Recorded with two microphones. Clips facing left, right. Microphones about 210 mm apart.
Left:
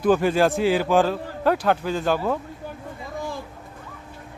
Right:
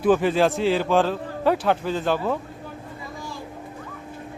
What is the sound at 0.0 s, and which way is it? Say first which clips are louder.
A man's voice: even; centre (ahead or behind).